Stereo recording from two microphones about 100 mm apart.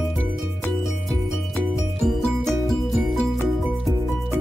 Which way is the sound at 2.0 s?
Centre (ahead or behind).